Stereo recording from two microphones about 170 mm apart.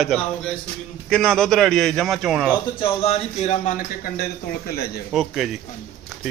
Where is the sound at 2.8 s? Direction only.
40° left (ahead or behind); by 5.0 s 65° left (ahead or behind).